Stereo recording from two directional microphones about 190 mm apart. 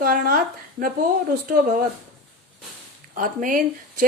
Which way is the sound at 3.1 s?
45° right (ahead or behind).